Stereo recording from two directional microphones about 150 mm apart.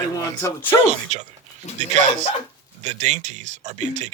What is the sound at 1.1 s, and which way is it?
Speech, 50° right (ahead or behind).